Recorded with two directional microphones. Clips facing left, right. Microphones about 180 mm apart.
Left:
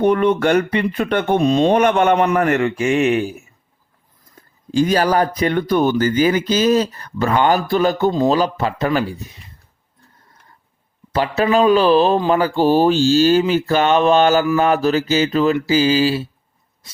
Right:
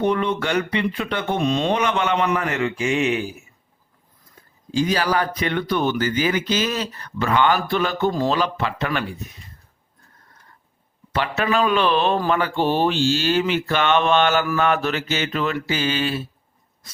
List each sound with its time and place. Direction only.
0.0 s speech: 50° left (ahead or behind)
4.7 s speech: 50° left (ahead or behind)
11.1 s speech: 35° left (ahead or behind)